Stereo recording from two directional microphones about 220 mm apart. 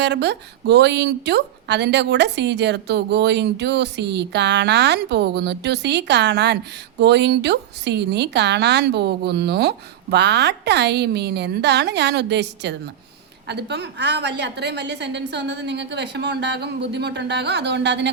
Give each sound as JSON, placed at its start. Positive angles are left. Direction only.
{"t": 0.0, "sound": "speech", "side_deg": -50}